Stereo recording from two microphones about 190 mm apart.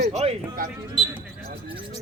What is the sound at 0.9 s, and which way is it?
Basketball bounce, 10° right (ahead or behind).